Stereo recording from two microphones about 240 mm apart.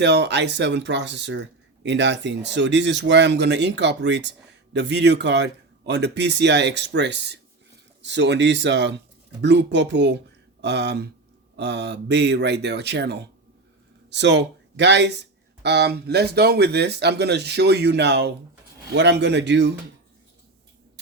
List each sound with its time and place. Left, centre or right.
0.0 s speech: right